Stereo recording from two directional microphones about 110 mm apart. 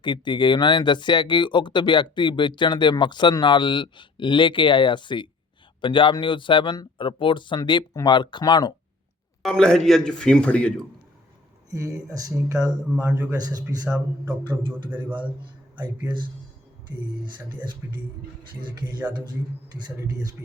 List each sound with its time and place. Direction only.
0.0 s speech: 45° left (ahead or behind)
9.4 s a man's voice: 5° left (ahead or behind)
11.7 s speech: 30° right (ahead or behind)
14.7 s a man's voice: 15° right (ahead or behind)
15.8 s speech: 45° right (ahead or behind)
17.2 s speech: 45° right (ahead or behind)
19.0 s a man's voice: 15° right (ahead or behind)